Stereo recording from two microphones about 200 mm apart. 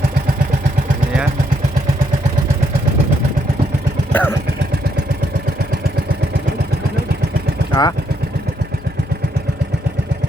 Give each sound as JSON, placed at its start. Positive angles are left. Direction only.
{"t": 4.1, "sound": "vehicle", "side_deg": 10}
{"t": 7.7, "sound": "speech", "side_deg": 20}